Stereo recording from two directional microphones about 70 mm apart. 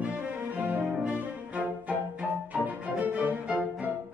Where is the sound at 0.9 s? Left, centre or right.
Centre.